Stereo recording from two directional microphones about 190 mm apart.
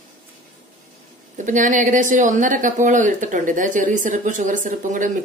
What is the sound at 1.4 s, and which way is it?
A woman's voice, 40° right (ahead or behind).